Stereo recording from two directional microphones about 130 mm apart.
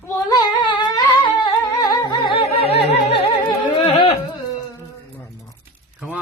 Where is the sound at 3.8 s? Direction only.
50° left (ahead or behind).